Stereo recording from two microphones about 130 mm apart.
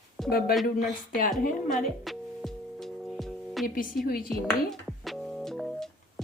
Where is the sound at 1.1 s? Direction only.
90° left.